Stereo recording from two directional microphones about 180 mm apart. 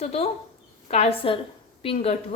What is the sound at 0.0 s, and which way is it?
A woman's voice, 35° left (ahead or behind).